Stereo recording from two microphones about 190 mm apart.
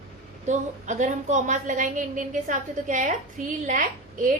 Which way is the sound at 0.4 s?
40° right (ahead or behind).